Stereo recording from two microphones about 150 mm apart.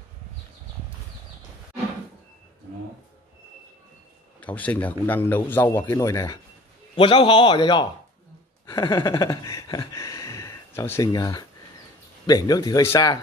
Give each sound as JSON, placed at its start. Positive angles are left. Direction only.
{"t": 4.4, "sound": "a man's voice", "side_deg": 10}
{"t": 7.0, "sound": "a man's voice", "side_deg": 35}
{"t": 8.6, "sound": "a sound", "side_deg": 25}
{"t": 12.3, "sound": "speech", "side_deg": 25}